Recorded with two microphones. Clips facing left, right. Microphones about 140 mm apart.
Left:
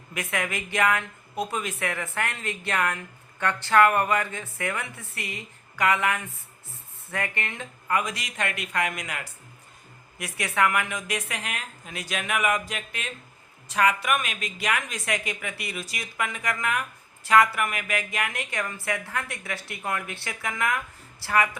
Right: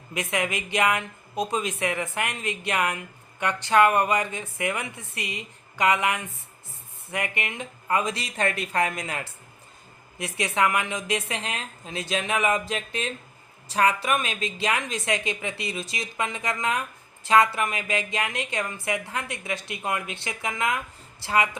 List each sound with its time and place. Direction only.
0.1 s a woman's voice: 20° right (ahead or behind)